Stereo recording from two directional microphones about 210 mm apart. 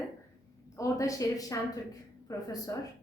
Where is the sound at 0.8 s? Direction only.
15° left (ahead or behind).